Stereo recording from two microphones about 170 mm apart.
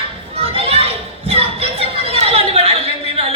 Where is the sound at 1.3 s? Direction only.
35° right (ahead or behind).